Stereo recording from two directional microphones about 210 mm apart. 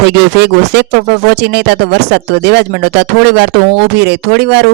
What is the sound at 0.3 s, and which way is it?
Speech, 55° right (ahead or behind).